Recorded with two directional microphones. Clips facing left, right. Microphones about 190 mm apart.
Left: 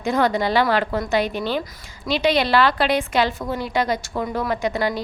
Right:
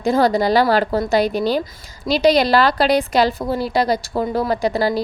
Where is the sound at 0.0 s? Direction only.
35° right (ahead or behind).